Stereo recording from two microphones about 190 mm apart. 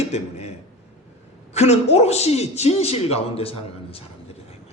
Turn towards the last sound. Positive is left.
turn(degrees=30)  # may be behind; listen again after turning